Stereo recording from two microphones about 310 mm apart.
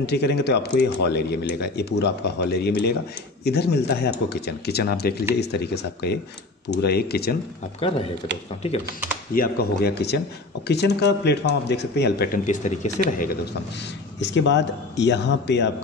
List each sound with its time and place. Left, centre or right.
0.0 s speech: left
7.8 s a man's voice: centre
9.3 s a man's voice: left